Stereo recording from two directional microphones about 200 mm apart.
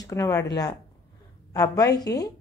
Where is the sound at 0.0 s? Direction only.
15° left (ahead or behind).